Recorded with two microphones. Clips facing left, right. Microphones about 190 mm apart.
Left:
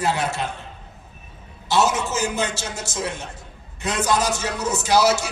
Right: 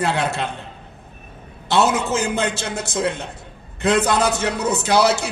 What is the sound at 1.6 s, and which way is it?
A man's voice, 60° right (ahead or behind).